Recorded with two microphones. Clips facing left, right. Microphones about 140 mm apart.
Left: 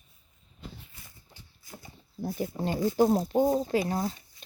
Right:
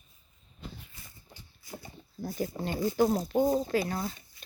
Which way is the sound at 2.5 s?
10° right (ahead or behind).